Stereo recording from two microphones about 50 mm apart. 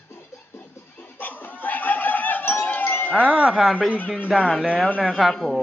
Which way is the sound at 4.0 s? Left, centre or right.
Left.